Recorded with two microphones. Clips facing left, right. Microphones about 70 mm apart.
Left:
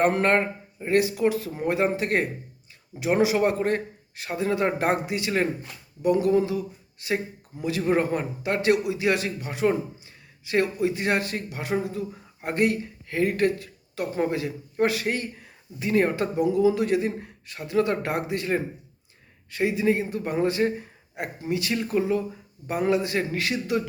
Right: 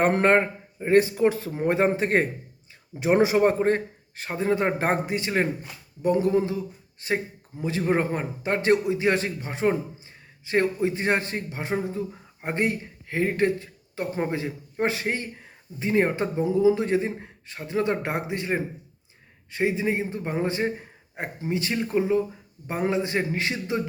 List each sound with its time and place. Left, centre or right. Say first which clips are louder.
0.0 s a man's voice: right 1 dB; right